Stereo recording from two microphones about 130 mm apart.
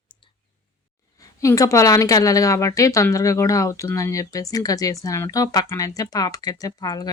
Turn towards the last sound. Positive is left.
turn(degrees=30)  # may be behind; listen again after turning